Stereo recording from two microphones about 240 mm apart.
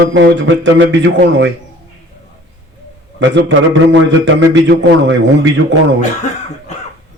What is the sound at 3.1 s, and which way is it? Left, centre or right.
A man's voice, right.